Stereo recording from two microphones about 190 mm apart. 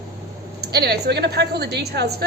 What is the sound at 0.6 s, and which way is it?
Speech, 60° right (ahead or behind).